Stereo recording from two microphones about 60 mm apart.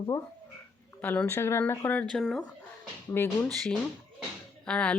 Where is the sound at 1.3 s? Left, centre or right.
Left.